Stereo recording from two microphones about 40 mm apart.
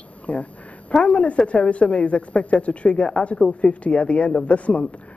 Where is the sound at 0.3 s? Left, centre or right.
Left.